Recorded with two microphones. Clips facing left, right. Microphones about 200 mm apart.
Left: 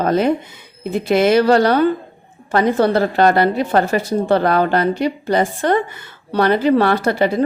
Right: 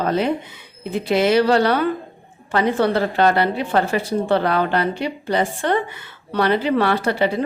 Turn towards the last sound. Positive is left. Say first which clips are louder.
# left 3 dB
turn(degrees=45)  # may be behind; listen again after turning